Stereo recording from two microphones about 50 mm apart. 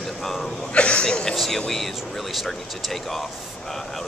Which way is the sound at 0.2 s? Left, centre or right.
Centre.